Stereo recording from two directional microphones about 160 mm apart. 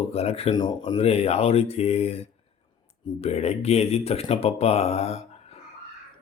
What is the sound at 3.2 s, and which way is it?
Speech, 40° left (ahead or behind).